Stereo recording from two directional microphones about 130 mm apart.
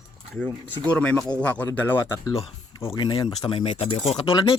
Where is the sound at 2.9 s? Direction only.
35° left (ahead or behind).